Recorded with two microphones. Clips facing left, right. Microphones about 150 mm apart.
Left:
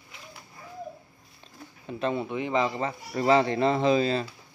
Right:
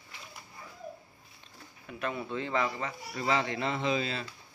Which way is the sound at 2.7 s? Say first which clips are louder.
Left 7 dB; 35° left (ahead or behind).